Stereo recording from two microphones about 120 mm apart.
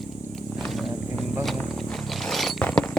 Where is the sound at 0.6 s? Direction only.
Centre (ahead or behind).